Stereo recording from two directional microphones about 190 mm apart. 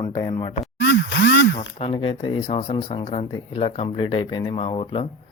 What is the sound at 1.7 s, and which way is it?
Speech, 30° left (ahead or behind).